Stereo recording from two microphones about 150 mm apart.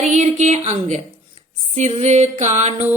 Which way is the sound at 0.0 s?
50° right (ahead or behind).